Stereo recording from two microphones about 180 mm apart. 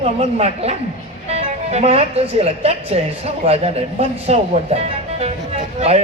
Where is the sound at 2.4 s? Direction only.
35° right (ahead or behind).